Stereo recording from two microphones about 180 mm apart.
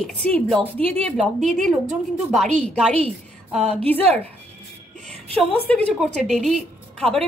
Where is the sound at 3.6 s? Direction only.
35° right (ahead or behind).